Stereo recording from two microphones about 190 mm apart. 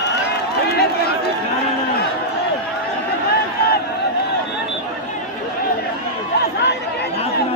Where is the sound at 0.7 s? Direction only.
55° left (ahead or behind).